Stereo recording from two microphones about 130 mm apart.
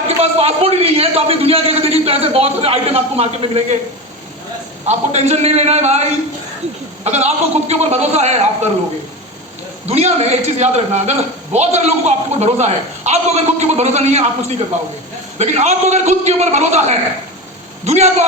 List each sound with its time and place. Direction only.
0.2 s a man's voice: 50° right (ahead or behind)
4.9 s a man's voice: 60° right (ahead or behind)
9.8 s a man's voice: 55° right (ahead or behind)